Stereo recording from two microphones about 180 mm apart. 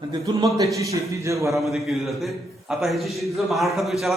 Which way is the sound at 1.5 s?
Centre (ahead or behind).